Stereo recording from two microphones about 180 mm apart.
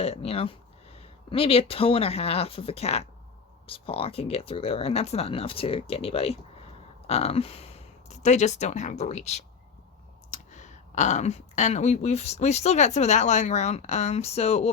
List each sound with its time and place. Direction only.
0.0 s speech: 35° left (ahead or behind)